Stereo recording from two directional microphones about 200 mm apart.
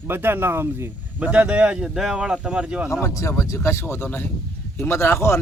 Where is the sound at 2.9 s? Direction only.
15° left (ahead or behind).